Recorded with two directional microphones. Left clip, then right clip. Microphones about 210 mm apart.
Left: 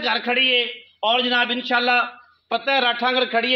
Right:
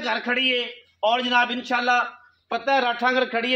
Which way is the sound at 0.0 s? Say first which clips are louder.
Left 3 dB; 40° left (ahead or behind).